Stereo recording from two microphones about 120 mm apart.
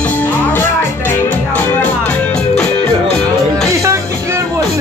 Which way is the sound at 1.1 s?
15° left (ahead or behind).